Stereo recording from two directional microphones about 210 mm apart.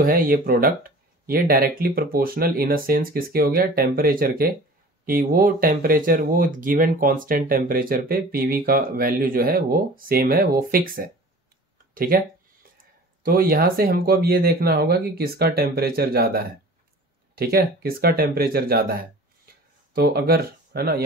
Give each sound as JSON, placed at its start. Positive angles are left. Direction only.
{"t": 0.0, "sound": "speech", "side_deg": -40}